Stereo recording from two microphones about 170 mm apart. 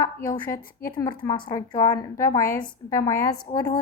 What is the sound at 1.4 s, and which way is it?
A woman's voice, 25° left (ahead or behind).